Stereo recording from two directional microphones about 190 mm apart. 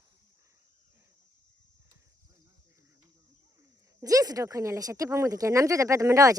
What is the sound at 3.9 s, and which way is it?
Speech, 20° right (ahead or behind).